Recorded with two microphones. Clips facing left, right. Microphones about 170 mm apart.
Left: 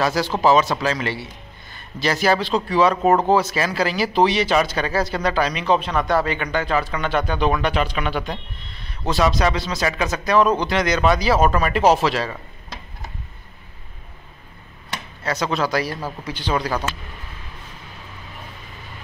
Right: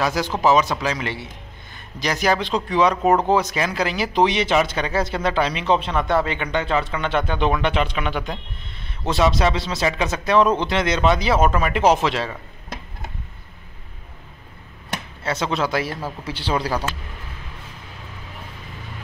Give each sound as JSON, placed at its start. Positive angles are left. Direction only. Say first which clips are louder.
{"t": 0.0, "sound": "a man's voice", "louder": "left 1 dB", "side_deg": -20}
{"t": 15.2, "sound": "speech", "louder": "left 1 dB", "side_deg": -25}